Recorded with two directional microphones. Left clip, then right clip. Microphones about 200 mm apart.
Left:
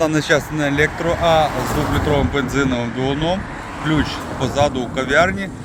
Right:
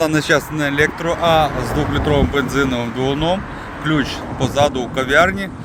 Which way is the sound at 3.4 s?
65° left (ahead or behind).